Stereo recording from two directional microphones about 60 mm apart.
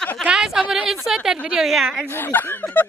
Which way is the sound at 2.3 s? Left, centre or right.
Left.